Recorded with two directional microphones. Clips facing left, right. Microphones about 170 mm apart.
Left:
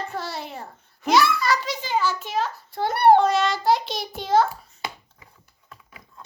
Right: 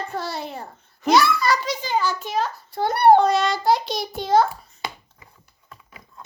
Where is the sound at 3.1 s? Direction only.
35° right (ahead or behind).